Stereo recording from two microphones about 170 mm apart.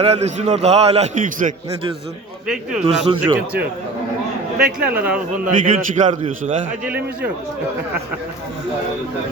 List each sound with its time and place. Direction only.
0.0 s a man's voice: 40° right (ahead or behind)
2.8 s speech: 25° right (ahead or behind)
4.8 s speech: 10° right (ahead or behind)
5.5 s a man's voice: 50° right (ahead or behind)
6.8 s speech: 10° right (ahead or behind)